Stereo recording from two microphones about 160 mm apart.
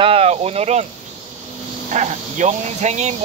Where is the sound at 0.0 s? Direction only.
40° right (ahead or behind).